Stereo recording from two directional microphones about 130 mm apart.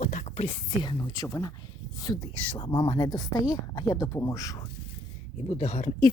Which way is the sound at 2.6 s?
40° left (ahead or behind).